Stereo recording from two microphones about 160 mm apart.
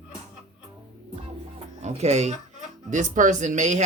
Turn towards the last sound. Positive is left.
turn(degrees=-50)  # may be behind; listen again after turning